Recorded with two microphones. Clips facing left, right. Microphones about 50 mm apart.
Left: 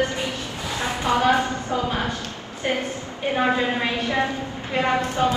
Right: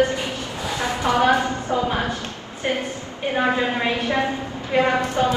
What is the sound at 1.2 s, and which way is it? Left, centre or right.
Speech, right.